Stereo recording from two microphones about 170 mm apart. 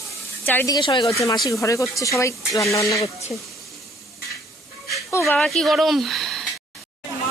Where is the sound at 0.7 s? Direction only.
30° left (ahead or behind).